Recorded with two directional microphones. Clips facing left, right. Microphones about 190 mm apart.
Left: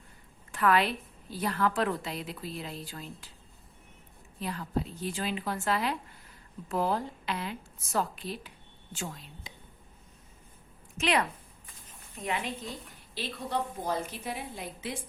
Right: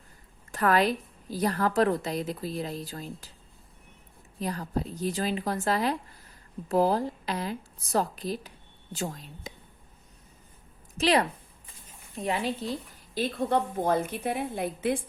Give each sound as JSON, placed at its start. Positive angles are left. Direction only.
{"t": 0.5, "sound": "a woman's voice", "side_deg": -40}
{"t": 4.4, "sound": "a woman's voice", "side_deg": -40}
{"t": 10.9, "sound": "a woman's voice", "side_deg": -35}
{"t": 13.1, "sound": "a woman's voice", "side_deg": -50}